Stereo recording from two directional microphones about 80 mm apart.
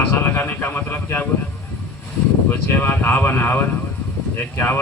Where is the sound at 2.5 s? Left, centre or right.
Left.